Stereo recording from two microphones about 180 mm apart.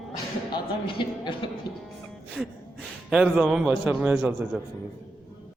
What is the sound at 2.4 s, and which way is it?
Speech, centre (ahead or behind).